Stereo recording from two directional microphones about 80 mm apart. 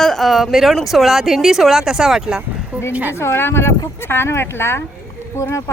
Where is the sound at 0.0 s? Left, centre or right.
Centre.